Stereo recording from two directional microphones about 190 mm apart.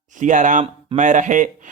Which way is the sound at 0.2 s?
40° right (ahead or behind).